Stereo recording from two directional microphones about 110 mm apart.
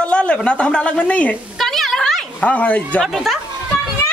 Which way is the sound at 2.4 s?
15° left (ahead or behind).